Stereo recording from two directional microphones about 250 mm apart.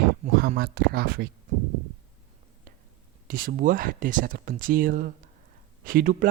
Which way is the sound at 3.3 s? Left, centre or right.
Right.